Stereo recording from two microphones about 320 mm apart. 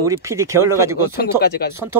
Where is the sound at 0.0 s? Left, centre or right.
Centre.